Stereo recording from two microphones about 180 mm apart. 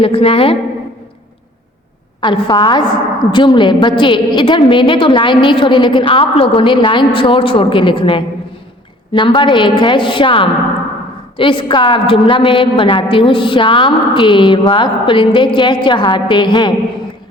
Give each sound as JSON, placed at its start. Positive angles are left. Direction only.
{"t": 0.0, "sound": "a woman's voice", "side_deg": 30}
{"t": 2.2, "sound": "a woman's voice", "side_deg": 25}